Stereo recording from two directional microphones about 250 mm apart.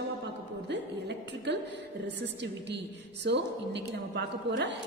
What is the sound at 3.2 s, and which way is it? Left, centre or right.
A woman's voice, right.